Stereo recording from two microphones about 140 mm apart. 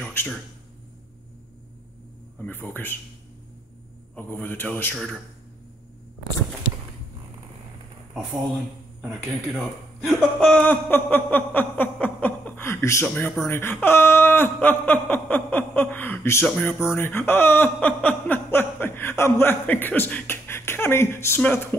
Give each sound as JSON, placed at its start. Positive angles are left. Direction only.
{"t": 0.0, "sound": "a sound", "side_deg": 15}
{"t": 2.4, "sound": "speech", "side_deg": 15}
{"t": 4.1, "sound": "speech", "side_deg": 15}
{"t": 4.9, "sound": "a man's voice", "side_deg": -5}
{"t": 9.0, "sound": "a man's voice", "side_deg": 0}
{"t": 10.7, "sound": "a sound", "side_deg": 15}
{"t": 13.0, "sound": "speech", "side_deg": 10}